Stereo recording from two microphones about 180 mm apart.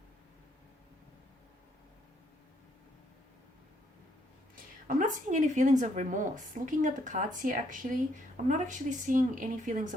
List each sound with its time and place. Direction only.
4.9 s speech: 45° right (ahead or behind)